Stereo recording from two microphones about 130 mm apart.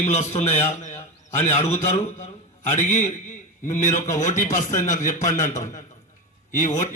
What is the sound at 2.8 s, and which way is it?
A man's voice, 65° left (ahead or behind).